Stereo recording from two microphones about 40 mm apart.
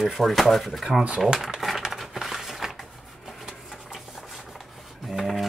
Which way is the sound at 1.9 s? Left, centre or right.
Centre.